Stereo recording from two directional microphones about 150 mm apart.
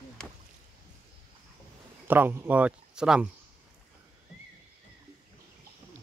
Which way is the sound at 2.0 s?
15° right (ahead or behind).